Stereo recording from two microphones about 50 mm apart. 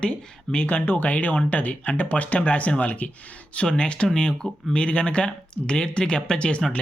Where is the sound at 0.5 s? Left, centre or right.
Left.